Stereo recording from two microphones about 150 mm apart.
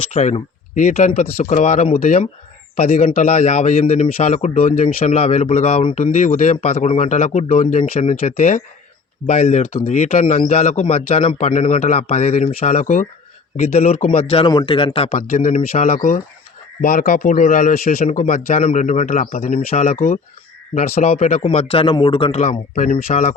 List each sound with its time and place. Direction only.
0.1 s speech: 50° left (ahead or behind)
2.7 s a man's voice: 40° left (ahead or behind)
5.9 s speech: 55° left (ahead or behind)
11.3 s a man's voice: 60° left (ahead or behind)
16.8 s speech: 60° left (ahead or behind); by 20.0 s 45° left (ahead or behind)
21.0 s a man's voice: 45° left (ahead or behind)
22.4 s speech: 50° left (ahead or behind)